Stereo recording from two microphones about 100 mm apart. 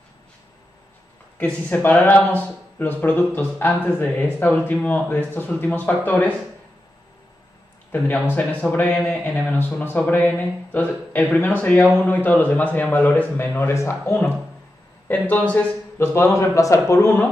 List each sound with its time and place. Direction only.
1.4 s speech: 15° left (ahead or behind)
8.4 s speech: 15° left (ahead or behind)
15.0 s speech: 15° left (ahead or behind)